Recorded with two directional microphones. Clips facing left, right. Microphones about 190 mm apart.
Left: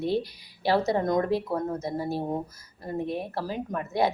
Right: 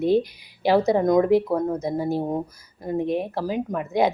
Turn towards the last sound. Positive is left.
turn(degrees=-15)  # may be behind; listen again after turning